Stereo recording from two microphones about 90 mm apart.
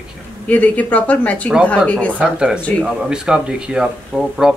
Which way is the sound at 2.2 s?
10° right (ahead or behind).